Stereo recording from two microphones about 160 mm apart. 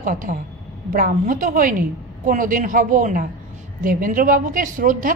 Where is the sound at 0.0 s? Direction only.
55° right (ahead or behind).